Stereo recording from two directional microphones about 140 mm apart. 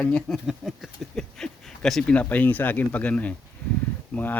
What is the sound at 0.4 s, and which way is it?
Speech, centre (ahead or behind).